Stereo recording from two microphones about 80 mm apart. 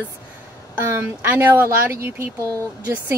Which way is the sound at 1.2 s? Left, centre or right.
Right.